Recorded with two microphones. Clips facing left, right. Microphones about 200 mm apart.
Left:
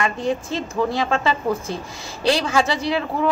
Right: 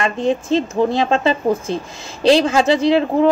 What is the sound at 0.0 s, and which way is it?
A woman's voice, 25° right (ahead or behind).